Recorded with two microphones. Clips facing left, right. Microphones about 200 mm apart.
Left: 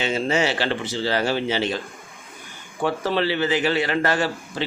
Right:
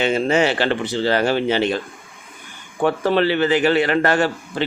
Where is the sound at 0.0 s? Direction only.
55° right (ahead or behind).